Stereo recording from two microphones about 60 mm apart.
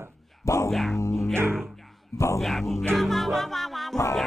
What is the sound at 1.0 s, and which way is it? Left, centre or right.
Speech, left.